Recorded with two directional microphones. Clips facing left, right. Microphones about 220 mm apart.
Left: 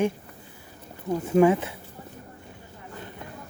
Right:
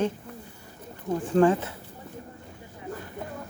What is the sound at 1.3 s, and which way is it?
Speech, 10° left (ahead or behind).